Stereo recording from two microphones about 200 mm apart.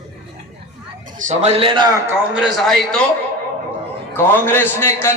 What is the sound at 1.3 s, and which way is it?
Speech, 35° right (ahead or behind).